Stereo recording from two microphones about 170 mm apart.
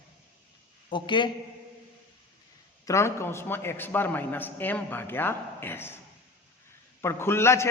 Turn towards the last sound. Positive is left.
turn(degrees=15)  # may be behind; listen again after turning